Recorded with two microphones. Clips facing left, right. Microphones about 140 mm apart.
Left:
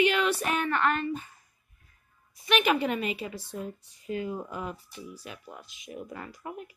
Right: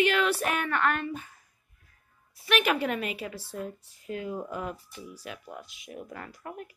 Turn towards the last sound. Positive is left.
turn(degrees=5)  # may be behind; listen again after turning